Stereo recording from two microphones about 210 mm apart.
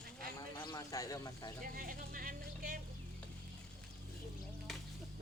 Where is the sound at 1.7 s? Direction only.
45° right (ahead or behind).